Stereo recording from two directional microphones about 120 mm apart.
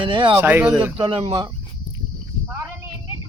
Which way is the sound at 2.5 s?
20° right (ahead or behind).